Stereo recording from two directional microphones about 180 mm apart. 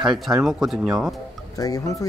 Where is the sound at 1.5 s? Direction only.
20° left (ahead or behind).